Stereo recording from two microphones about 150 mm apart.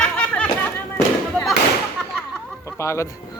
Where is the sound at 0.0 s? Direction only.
5° left (ahead or behind).